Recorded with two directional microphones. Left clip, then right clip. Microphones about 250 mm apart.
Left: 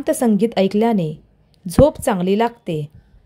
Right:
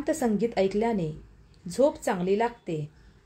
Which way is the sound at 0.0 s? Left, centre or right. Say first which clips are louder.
Left 9 dB; left.